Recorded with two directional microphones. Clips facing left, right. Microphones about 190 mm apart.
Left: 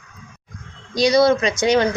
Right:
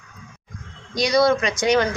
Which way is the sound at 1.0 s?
25° left (ahead or behind).